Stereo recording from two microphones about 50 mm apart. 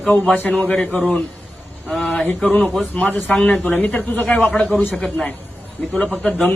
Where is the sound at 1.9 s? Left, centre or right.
Centre.